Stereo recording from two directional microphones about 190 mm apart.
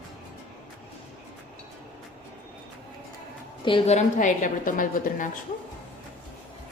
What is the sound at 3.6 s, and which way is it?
A woman's voice, 25° left (ahead or behind).